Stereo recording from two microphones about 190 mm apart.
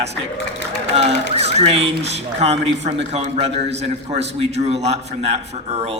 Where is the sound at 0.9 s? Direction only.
35° right (ahead or behind).